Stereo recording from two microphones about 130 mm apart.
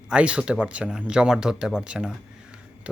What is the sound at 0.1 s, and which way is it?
Speech, 10° right (ahead or behind).